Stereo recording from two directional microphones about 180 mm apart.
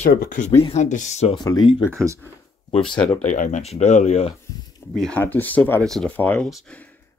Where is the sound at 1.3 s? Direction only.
25° left (ahead or behind).